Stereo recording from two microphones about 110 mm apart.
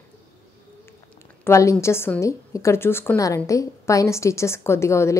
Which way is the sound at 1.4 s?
30° left (ahead or behind).